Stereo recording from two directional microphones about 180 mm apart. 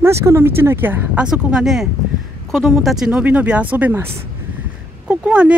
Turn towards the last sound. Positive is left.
turn(degrees=-5)  # may be behind; listen again after turning